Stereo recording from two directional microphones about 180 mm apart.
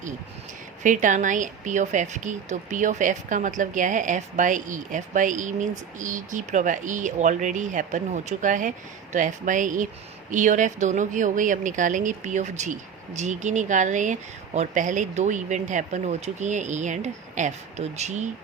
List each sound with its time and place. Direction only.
0.8 s a woman's voice: 45° right (ahead or behind)